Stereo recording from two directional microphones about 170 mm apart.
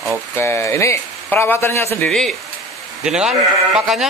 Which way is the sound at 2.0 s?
Centre (ahead or behind).